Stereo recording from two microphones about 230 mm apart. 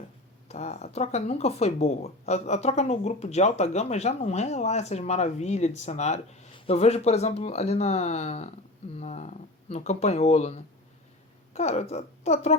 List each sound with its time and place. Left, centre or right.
0.4 s speech: left